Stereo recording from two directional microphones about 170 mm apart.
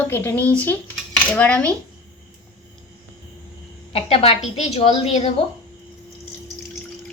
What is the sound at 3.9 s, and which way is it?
A woman's voice, 35° left (ahead or behind).